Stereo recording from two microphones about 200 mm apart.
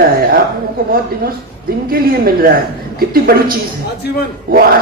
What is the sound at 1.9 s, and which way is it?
Speech, 45° right (ahead or behind).